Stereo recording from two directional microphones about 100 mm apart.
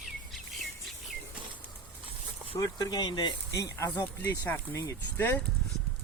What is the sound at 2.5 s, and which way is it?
Speech, 35° left (ahead or behind).